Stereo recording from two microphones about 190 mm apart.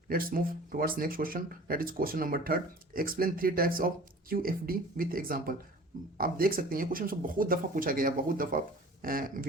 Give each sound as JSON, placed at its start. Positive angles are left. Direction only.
{"t": 0.1, "sound": "speech", "side_deg": -50}